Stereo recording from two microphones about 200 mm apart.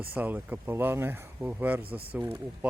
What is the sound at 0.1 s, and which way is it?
Speech, 10° right (ahead or behind).